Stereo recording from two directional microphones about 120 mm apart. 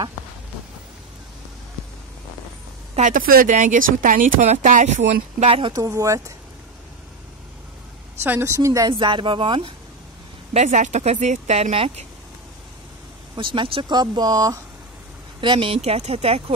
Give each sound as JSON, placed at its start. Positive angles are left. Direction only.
{"t": 3.0, "sound": "speech", "side_deg": -90}
{"t": 5.7, "sound": "a woman's voice", "side_deg": -30}
{"t": 8.2, "sound": "a woman's voice", "side_deg": -20}
{"t": 8.9, "sound": "speech", "side_deg": -40}
{"t": 10.5, "sound": "speech", "side_deg": -80}
{"t": 11.7, "sound": "speech", "side_deg": -50}
{"t": 13.4, "sound": "speech", "side_deg": -45}
{"t": 15.4, "sound": "speech", "side_deg": -45}